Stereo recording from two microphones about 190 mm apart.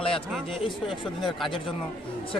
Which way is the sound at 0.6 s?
25° left (ahead or behind).